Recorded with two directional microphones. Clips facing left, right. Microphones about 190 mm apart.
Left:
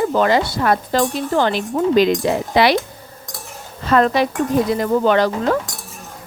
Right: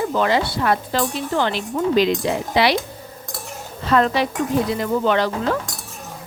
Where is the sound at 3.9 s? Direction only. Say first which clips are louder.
Left 3 dB; 45° left (ahead or behind).